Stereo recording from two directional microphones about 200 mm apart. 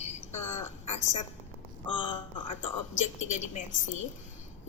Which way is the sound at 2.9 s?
35° left (ahead or behind).